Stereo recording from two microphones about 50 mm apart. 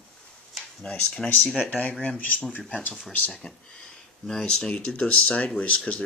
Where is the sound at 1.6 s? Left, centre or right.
Left.